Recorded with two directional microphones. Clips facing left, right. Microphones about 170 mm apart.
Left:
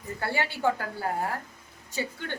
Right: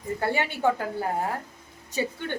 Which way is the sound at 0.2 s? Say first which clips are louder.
Right 2 dB; 20° right (ahead or behind).